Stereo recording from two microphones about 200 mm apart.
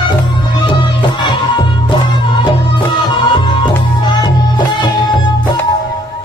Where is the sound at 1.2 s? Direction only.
25° left (ahead or behind).